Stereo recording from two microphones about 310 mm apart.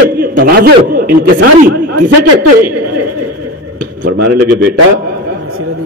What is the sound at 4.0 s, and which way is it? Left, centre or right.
Speech, right.